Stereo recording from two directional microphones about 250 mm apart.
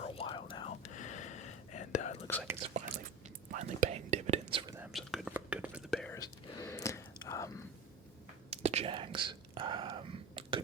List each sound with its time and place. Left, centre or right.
0.0 s whispering: left
2.2 s whispering: centre
3.2 s whispering: right
4.6 s whispering: centre
4.9 s whispering: centre
6.1 s whispering: centre
8.4 s whispering: right